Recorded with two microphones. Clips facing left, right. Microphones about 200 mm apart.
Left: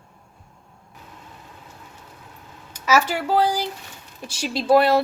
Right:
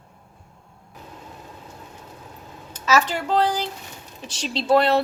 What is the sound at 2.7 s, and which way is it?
Speech, 10° left (ahead or behind).